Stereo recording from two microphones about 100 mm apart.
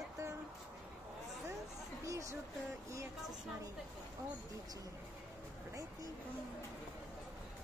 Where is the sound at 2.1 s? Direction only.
30° right (ahead or behind).